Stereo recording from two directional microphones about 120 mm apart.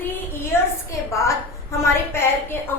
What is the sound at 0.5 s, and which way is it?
A woman's voice, 20° left (ahead or behind).